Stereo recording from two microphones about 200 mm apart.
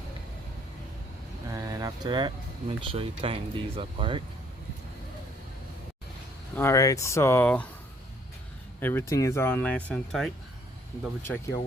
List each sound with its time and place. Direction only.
1.5 s speech: 15° right (ahead or behind)
6.6 s speech: 15° left (ahead or behind)
8.8 s speech: 10° left (ahead or behind)
11.2 s speech: 15° left (ahead or behind)